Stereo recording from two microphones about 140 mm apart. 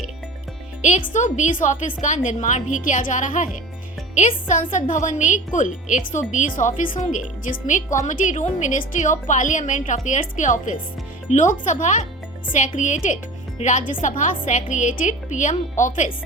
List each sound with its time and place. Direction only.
0.8 s a woman's voice: 60° left (ahead or behind)